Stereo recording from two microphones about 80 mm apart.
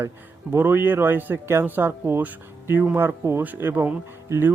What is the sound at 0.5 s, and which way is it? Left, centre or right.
Speech, right.